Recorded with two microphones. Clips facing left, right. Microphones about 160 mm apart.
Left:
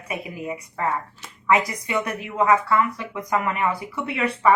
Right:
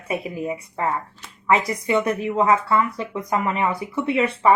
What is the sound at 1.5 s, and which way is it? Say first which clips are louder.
Speech: right 4 dB; 30° right (ahead or behind).